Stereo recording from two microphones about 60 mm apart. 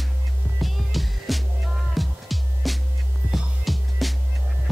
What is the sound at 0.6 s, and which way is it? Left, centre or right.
Music, centre.